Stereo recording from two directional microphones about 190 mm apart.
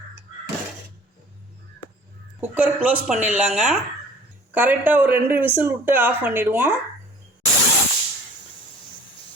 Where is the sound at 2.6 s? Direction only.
10° right (ahead or behind).